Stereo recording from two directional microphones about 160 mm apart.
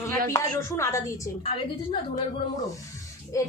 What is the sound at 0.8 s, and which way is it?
Speech, 20° left (ahead or behind).